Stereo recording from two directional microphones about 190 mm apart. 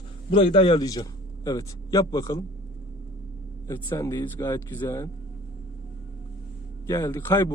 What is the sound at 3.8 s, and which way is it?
Speech, 15° left (ahead or behind).